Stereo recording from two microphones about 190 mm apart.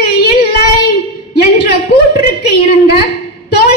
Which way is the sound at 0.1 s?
55° left (ahead or behind).